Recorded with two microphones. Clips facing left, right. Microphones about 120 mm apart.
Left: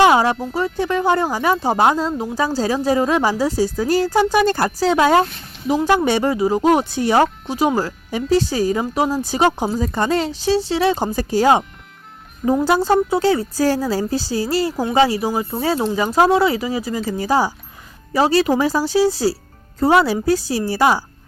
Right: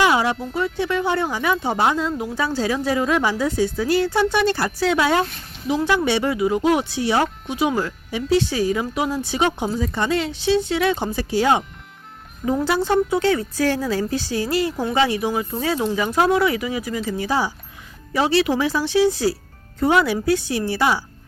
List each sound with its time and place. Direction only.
0.0 s music: 40° left (ahead or behind)
0.5 s speech: 40° left (ahead or behind)
7.4 s speech: 35° left (ahead or behind)
12.6 s speech: 40° left (ahead or behind)